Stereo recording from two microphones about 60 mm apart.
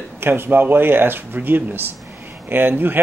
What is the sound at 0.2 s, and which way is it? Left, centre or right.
Speech, right.